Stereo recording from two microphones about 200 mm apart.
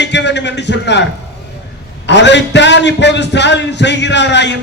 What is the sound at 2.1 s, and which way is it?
A man's voice, 60° left (ahead or behind).